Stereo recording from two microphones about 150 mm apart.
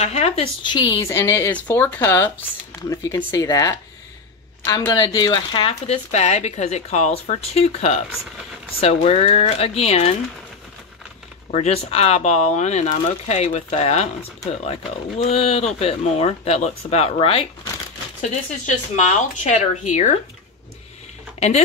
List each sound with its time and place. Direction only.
0.0 s speech: 45° left (ahead or behind)
0.7 s a woman's voice: 30° left (ahead or behind)
1.0 s a woman's voice: 15° left (ahead or behind); by 10.1 s 45° left (ahead or behind)
11.5 s speech: 45° left (ahead or behind)
15.2 s speech: 40° left (ahead or behind)
18.2 s speech: 55° left (ahead or behind)
21.4 s speech: 50° left (ahead or behind)